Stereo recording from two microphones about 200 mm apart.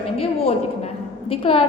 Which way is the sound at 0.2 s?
30° left (ahead or behind).